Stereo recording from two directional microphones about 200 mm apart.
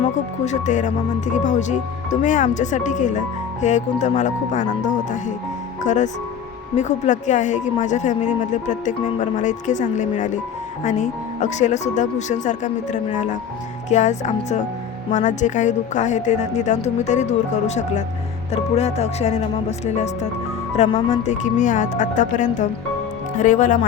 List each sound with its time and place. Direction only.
0.0 s speech: 35° left (ahead or behind)
18.5 s speech: 35° left (ahead or behind)
20.7 s speech: 35° left (ahead or behind)